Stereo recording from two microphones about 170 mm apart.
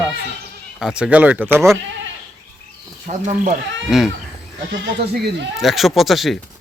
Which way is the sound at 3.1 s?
45° right (ahead or behind).